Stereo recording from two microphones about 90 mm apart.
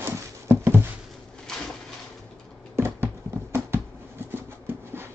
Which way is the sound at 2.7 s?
30° right (ahead or behind).